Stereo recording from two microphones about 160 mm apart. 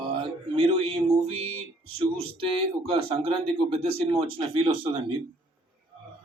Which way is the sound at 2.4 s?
35° right (ahead or behind).